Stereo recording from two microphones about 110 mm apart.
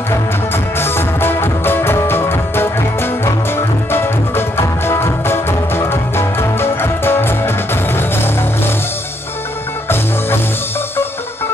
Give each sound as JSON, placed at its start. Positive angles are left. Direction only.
{"t": 0.7, "sound": "music", "side_deg": 20}